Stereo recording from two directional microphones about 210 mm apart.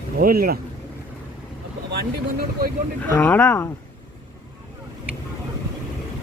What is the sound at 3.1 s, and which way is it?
Speech, 10° left (ahead or behind).